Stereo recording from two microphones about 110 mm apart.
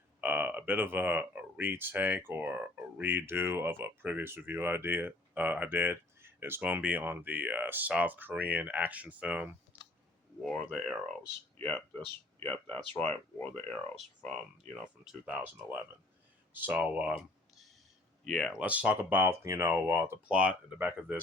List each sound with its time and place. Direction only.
0.2 s speech: 15° right (ahead or behind)
11.5 s speech: 15° left (ahead or behind)
15.0 s speech: 5° right (ahead or behind)
18.6 s speech: 10° right (ahead or behind)
20.2 s speech: 10° right (ahead or behind)